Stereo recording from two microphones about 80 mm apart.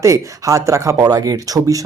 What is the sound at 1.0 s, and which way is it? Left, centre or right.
Speech, right.